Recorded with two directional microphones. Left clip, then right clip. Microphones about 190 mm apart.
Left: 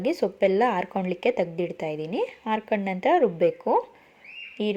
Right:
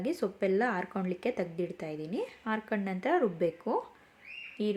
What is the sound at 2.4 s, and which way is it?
Speech, 30° right (ahead or behind).